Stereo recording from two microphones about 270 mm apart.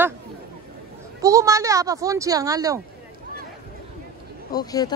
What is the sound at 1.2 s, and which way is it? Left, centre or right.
Speech, centre.